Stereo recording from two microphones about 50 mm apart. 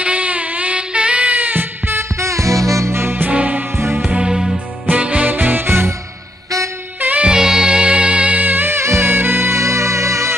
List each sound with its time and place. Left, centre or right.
0.0 s music: right
2.1 s music: right
3.0 s music: right
3.3 s music: right
3.7 s music: right
4.1 s music: centre
4.8 s music: right
7.0 s music: right
7.2 s music: centre; by 8.7 s right
8.7 s music: right
9.1 s music: right